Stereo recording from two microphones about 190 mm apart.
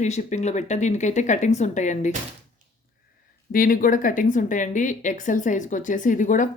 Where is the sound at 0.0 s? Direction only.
40° left (ahead or behind).